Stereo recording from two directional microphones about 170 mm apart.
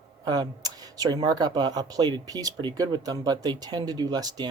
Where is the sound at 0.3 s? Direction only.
25° right (ahead or behind).